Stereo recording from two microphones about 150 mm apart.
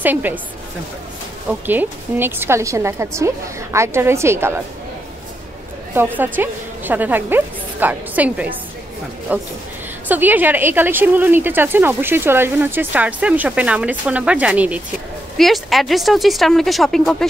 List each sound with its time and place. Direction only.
0.0 s speech: 10° right (ahead or behind)
1.5 s speech: 10° right (ahead or behind)
6.1 s a woman's voice: 10° right (ahead or behind)